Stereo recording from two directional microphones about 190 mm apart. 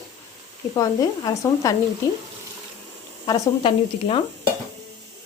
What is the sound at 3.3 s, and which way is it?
Speech, 25° left (ahead or behind).